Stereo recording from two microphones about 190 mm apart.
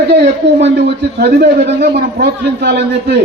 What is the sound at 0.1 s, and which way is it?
A man's voice, 60° right (ahead or behind).